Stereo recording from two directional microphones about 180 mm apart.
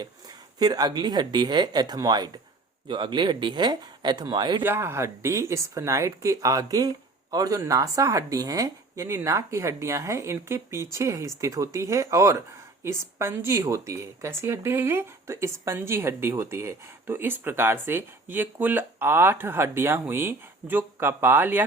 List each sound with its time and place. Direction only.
0.6 s speech: 20° right (ahead or behind)
4.6 s speech: 15° right (ahead or behind)